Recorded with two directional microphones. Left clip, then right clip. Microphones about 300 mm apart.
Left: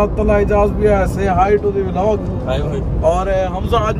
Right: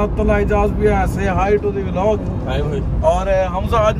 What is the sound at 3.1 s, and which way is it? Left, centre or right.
Speech, centre.